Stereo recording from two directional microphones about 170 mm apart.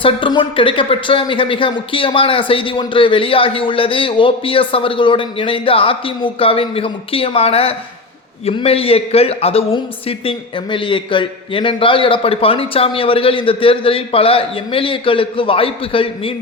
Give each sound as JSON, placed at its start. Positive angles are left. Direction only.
{"t": 0.0, "sound": "a man's voice", "side_deg": 30}